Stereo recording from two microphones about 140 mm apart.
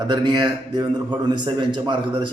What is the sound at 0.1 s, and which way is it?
A man's voice, 35° right (ahead or behind).